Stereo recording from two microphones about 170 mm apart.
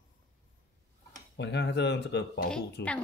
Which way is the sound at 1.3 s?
90° left.